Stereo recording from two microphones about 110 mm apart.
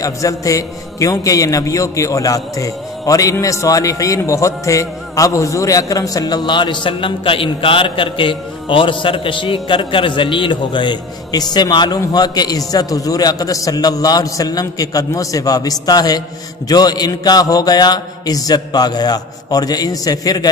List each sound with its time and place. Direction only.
0.0 s a man's voice: 30° left (ahead or behind)